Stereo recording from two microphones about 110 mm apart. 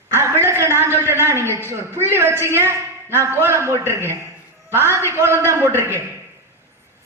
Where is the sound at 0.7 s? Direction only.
25° right (ahead or behind).